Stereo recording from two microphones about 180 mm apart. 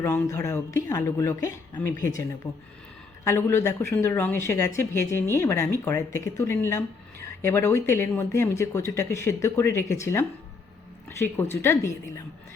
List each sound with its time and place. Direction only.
0.0 s speech: 15° left (ahead or behind)
3.2 s speech: 15° left (ahead or behind)